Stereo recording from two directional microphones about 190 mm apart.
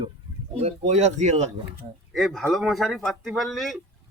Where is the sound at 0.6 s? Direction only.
35° right (ahead or behind).